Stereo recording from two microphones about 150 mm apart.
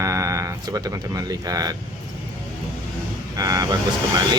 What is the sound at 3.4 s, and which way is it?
Speech, 25° right (ahead or behind).